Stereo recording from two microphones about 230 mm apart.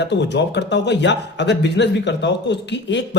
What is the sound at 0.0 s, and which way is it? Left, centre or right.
A man's voice, left.